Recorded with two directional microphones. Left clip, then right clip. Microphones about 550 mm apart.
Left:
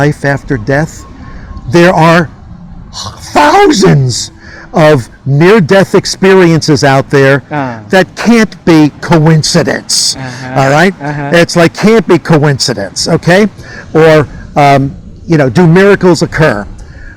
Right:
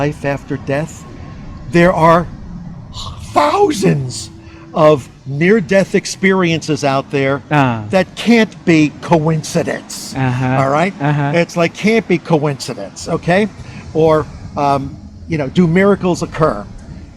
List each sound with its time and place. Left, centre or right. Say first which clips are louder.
0.0 s a man's voice: left 8 dB; left
2.9 s a man's voice: left 5 dB; left
7.5 s speech: right 1 dB; right
7.9 s a man's voice: left 6 dB; centre
10.2 s speech: right 3 dB; right
10.6 s a man's voice: left 8 dB; left
11.0 s speech: left 1 dB; right
11.4 s a man's voice: left 8 dB; left
14.2 s a man's voice: left 10 dB; left